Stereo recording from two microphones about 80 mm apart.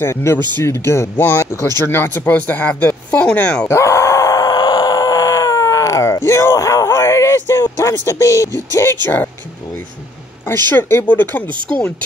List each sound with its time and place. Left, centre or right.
0.0 s speech: left; by 3.6 s centre
3.6 s groan: left
7.7 s speech: left
10.7 s speech: left